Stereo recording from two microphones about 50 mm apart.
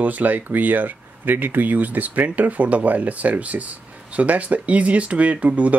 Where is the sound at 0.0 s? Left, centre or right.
Right.